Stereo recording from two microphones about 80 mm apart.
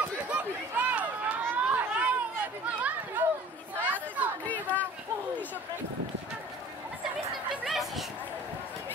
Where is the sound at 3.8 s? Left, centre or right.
Centre.